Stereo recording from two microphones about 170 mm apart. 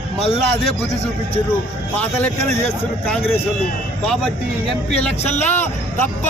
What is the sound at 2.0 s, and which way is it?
Speech, 10° left (ahead or behind).